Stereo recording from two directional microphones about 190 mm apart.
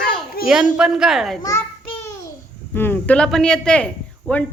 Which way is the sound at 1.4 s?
15° left (ahead or behind).